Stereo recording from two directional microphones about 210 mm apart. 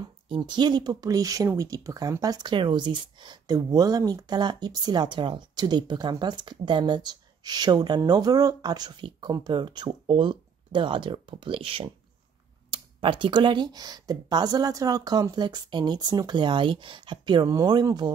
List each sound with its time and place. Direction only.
0.3 s speech: 20° right (ahead or behind)